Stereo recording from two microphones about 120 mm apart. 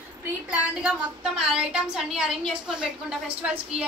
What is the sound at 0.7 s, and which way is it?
A woman's voice, 5° right (ahead or behind).